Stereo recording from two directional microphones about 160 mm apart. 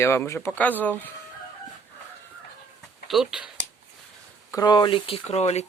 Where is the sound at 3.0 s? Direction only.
Centre (ahead or behind).